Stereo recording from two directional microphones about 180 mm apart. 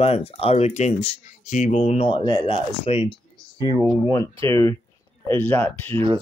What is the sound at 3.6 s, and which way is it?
Speech, 20° right (ahead or behind).